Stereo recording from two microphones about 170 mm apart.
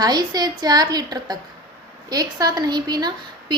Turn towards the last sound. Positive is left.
turn(degrees=-25)  # may be behind; listen again after turning